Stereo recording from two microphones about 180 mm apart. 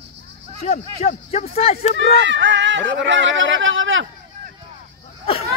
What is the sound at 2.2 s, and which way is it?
Speech, 85° right.